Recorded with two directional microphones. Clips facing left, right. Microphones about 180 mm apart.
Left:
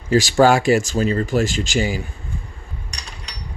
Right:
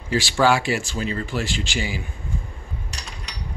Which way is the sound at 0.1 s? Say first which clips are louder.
Left 5 dB; 45° left (ahead or behind).